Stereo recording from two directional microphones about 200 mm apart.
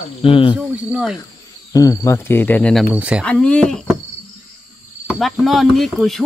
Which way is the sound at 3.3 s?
5° left (ahead or behind).